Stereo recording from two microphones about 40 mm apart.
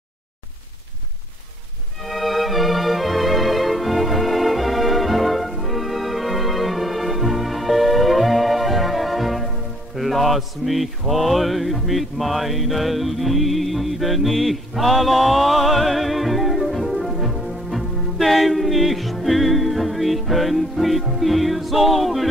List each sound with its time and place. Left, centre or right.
2.0 s music: centre
9.9 s mantra: centre